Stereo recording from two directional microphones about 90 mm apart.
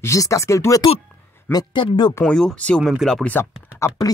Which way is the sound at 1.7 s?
55° left (ahead or behind).